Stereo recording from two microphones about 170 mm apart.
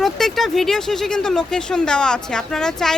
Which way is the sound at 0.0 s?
Centre (ahead or behind).